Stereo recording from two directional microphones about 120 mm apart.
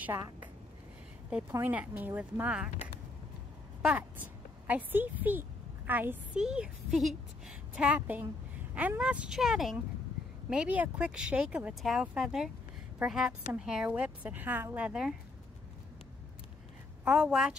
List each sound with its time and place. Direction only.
0.0 s a woman's voice: 15° right (ahead or behind)
1.5 s speech: 15° right (ahead or behind)
3.8 s a woman's voice: 15° right (ahead or behind)
17.0 s speech: 5° right (ahead or behind)